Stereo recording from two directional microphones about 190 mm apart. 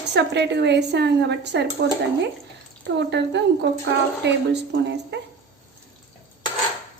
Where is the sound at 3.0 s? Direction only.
65° right (ahead or behind).